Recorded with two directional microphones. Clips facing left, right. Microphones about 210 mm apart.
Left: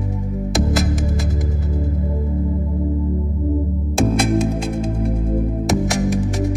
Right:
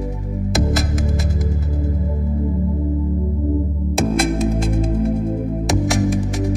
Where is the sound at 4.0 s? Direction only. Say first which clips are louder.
Left 1 dB; centre (ahead or behind).